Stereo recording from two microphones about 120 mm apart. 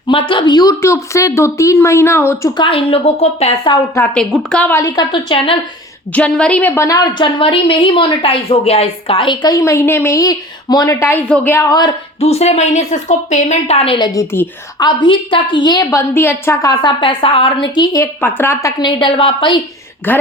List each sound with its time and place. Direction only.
0.1 s speech: 45° left (ahead or behind); by 2.5 s 20° left (ahead or behind)
2.6 s a woman's voice: 50° left (ahead or behind)
3.9 s a woman's voice: 10° left (ahead or behind)
4.9 s a woman's voice: 45° left (ahead or behind)
6.1 s a woman's voice: 10° left (ahead or behind)
6.8 s a woman's voice: 30° left (ahead or behind)
11.7 s a woman's voice: 35° left (ahead or behind)
12.2 s a woman's voice: 65° left (ahead or behind); by 14.1 s 50° left (ahead or behind)
14.1 s a woman's voice: 25° left (ahead or behind)
16.8 s a woman's voice: 45° left (ahead or behind)
17.9 s speech: 20° left (ahead or behind)
18.8 s a woman's voice: 40° left (ahead or behind)
20.1 s a woman's voice: 15° left (ahead or behind)